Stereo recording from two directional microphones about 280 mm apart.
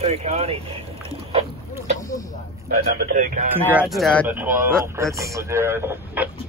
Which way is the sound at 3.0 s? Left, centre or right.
Right.